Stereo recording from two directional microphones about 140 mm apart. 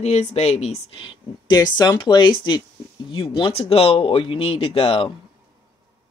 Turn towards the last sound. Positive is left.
turn(degrees=45)  # may be behind; listen again after turning